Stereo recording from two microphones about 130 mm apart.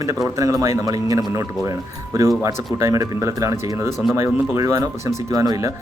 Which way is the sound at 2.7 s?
25° right (ahead or behind).